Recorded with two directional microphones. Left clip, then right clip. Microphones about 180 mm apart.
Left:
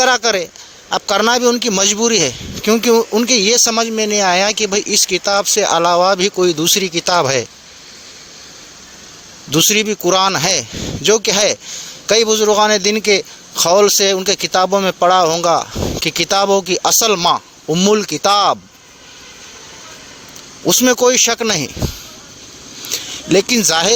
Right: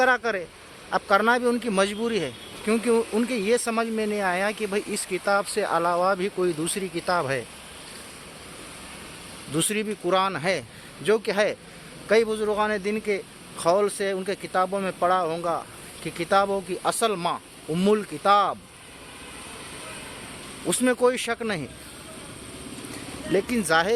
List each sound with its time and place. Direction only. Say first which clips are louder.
0.0 s a man's voice: left 9 dB; 35° left (ahead or behind)
9.5 s a man's voice: left 14 dB; 40° left (ahead or behind)
20.7 s a man's voice: left 10 dB; 40° left (ahead or behind)
23.3 s a man's voice: left 9 dB; 40° left (ahead or behind)